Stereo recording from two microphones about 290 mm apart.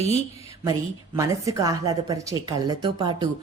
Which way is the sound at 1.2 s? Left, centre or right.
Centre.